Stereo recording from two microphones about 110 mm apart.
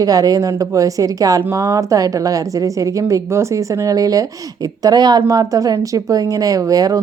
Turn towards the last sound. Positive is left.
turn(degrees=-35)  # may be behind; listen again after turning